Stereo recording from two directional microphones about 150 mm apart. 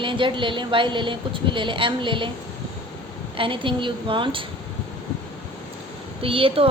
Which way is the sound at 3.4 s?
35° right (ahead or behind).